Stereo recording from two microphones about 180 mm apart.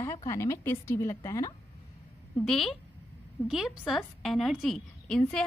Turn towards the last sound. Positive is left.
turn(degrees=5)  # may be behind; listen again after turning